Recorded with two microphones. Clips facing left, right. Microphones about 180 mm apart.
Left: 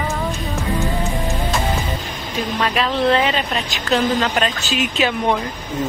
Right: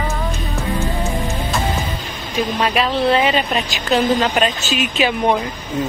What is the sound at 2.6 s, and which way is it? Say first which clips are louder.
Speech: even; 15° right (ahead or behind).